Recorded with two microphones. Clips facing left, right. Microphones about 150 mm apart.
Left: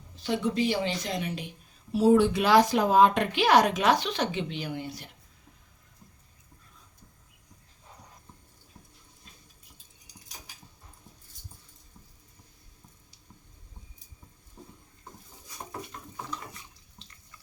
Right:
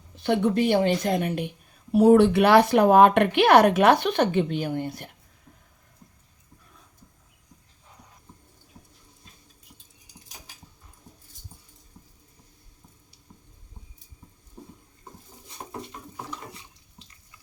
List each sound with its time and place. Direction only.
0.2 s a woman's voice: 60° right (ahead or behind)